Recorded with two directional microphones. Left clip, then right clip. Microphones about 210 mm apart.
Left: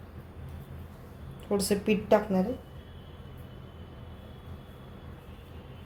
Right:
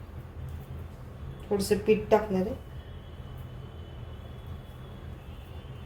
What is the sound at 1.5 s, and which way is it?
Speech, 30° left (ahead or behind).